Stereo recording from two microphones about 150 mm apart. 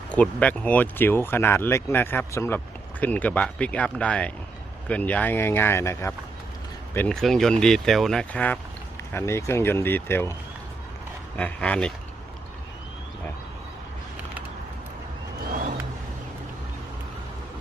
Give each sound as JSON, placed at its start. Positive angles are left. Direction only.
{"t": 0.1, "sound": "speech", "side_deg": 10}
{"t": 6.9, "sound": "speech", "side_deg": 10}
{"t": 11.3, "sound": "speech", "side_deg": 10}